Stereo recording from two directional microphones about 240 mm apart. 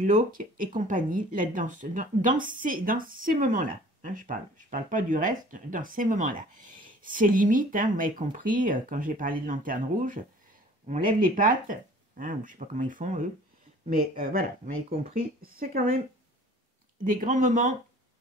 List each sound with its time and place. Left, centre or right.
0.0 s speech: right
10.9 s speech: right
11.1 s speech: right
15.6 s speech: right
17.0 s speech: right